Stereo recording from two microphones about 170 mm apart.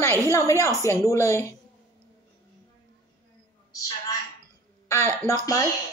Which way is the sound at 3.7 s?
20° left (ahead or behind).